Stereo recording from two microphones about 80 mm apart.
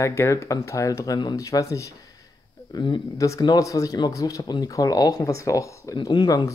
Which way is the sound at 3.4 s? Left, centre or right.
Left.